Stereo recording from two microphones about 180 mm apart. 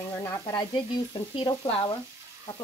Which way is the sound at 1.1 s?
30° left (ahead or behind).